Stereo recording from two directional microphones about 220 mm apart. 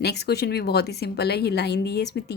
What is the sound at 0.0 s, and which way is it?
A woman's voice, 45° left (ahead or behind).